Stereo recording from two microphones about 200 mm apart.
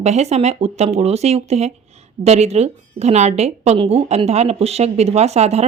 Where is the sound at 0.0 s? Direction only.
35° right (ahead or behind).